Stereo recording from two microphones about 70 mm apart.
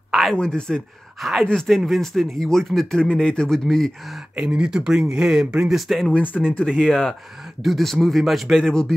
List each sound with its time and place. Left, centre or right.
0.1 s a sound: centre
0.4 s speech: centre
4.4 s speech: centre
6.1 s speech: left
6.9 s speech: centre